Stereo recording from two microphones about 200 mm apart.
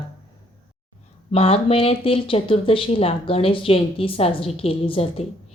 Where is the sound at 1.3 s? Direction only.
30° left (ahead or behind).